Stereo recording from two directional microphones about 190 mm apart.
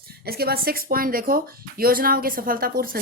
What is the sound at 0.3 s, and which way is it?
Speech, 55° right (ahead or behind).